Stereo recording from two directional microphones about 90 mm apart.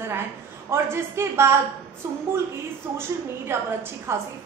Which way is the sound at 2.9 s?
25° right (ahead or behind).